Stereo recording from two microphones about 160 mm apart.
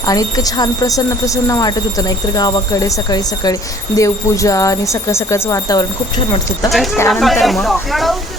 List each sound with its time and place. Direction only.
0.0 s speech: 20° left (ahead or behind)
7.1 s speech: centre (ahead or behind)